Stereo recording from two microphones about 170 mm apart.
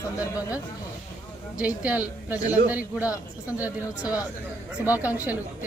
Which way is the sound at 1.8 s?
10° right (ahead or behind).